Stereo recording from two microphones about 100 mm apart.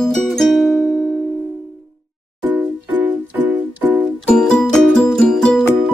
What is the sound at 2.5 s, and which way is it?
Music, 15° right (ahead or behind).